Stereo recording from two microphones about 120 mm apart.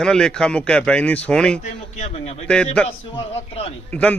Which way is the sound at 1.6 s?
65° left (ahead or behind).